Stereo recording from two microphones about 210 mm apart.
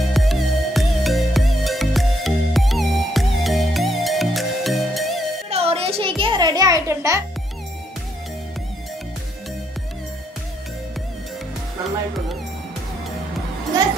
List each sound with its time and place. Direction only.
0.1 s music: centre (ahead or behind)
5.5 s music: 30° right (ahead or behind)